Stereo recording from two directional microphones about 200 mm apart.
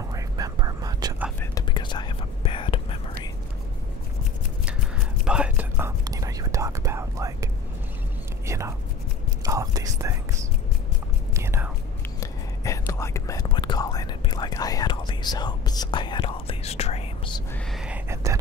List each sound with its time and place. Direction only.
0.1 s whispering: 20° right (ahead or behind)
1.4 s whispering: 20° left (ahead or behind)
4.6 s whispering: 5° right (ahead or behind)
8.5 s whispering: 15° right (ahead or behind)
11.3 s whispering: 10° right (ahead or behind)
12.2 s whispering: 15° left (ahead or behind); by 17.4 s 30° left (ahead or behind)
17.7 s whispering: 5° right (ahead or behind)